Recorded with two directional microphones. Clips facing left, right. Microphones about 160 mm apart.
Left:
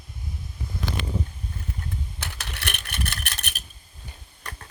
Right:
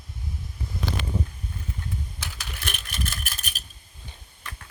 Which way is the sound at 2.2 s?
60° left (ahead or behind).